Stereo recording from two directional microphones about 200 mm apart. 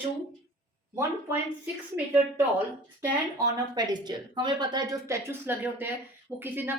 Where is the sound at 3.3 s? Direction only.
20° right (ahead or behind).